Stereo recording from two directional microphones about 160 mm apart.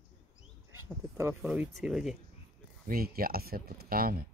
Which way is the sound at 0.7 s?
15° right (ahead or behind).